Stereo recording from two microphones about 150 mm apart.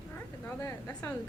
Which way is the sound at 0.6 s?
15° left (ahead or behind).